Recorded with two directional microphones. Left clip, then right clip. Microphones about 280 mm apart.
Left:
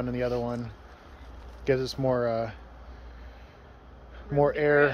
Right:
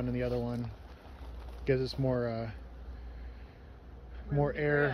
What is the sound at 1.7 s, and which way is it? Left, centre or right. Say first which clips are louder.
Speech: left 5 dB; centre.